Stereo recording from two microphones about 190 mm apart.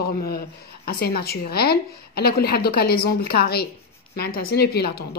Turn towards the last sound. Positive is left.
turn(degrees=55)  # may be behind; listen again after turning